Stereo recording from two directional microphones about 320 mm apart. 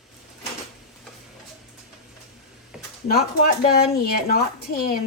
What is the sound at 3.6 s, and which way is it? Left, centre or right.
Speech, left.